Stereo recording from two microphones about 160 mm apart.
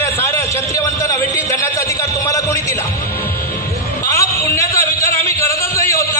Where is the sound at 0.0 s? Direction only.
15° left (ahead or behind).